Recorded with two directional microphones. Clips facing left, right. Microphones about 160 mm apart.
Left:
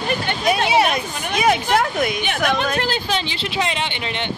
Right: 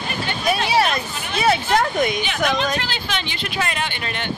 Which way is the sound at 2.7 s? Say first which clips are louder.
Left 4 dB; 45° left (ahead or behind).